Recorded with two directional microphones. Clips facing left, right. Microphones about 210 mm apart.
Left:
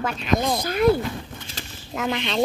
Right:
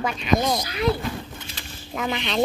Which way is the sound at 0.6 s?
50° left (ahead or behind).